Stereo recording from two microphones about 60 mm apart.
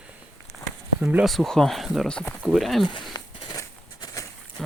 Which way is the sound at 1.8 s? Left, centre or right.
Centre.